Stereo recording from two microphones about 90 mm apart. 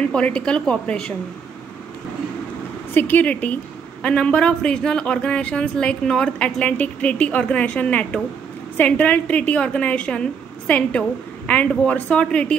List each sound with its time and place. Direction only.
0.1 s speech: 10° left (ahead or behind)
2.9 s speech: 20° left (ahead or behind)